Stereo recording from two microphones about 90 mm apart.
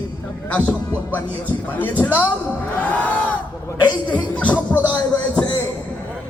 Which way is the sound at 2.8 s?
15° left (ahead or behind).